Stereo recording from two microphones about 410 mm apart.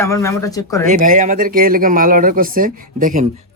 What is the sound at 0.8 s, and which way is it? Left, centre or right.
Speech, centre.